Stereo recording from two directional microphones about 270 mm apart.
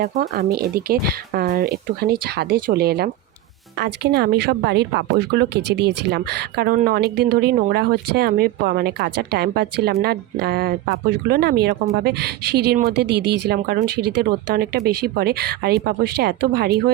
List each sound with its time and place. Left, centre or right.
0.0 s speech: right